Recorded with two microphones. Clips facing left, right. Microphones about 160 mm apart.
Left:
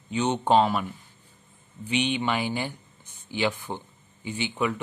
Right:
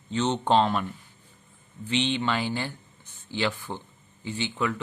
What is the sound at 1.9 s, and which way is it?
Speech, 15° left (ahead or behind).